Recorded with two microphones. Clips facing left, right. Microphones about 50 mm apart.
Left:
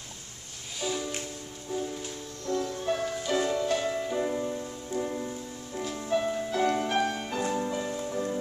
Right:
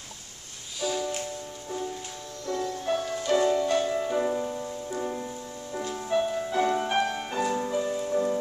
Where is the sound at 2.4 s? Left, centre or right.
Centre.